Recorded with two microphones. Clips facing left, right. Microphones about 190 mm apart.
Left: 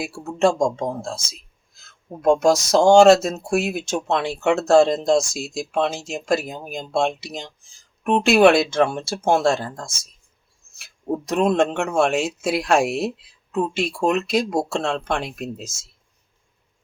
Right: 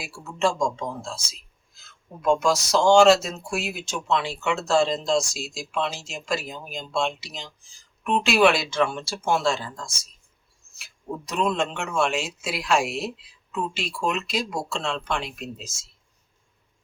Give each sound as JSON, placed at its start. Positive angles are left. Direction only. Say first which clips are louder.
{"t": 0.0, "sound": "speech", "louder": "left 6 dB", "side_deg": 50}
{"t": 2.2, "sound": "speech", "louder": "left 5 dB", "side_deg": 45}